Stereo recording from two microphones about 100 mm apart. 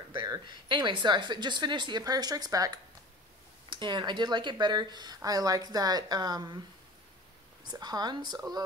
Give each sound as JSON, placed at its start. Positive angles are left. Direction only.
{"t": 0.3, "sound": "speech", "side_deg": -50}
{"t": 3.7, "sound": "speech", "side_deg": -50}
{"t": 7.6, "sound": "speech", "side_deg": -40}